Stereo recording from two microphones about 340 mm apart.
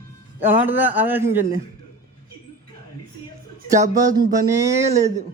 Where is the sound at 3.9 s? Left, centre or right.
Centre.